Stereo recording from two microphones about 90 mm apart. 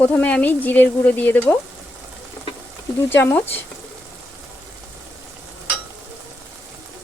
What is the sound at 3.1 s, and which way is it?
Speech, 25° left (ahead or behind).